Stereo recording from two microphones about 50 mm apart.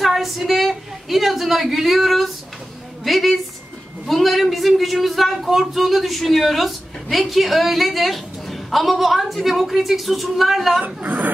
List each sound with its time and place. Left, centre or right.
0.0 s a sound: centre
4.1 s speech: centre
11.0 s a woman's voice: right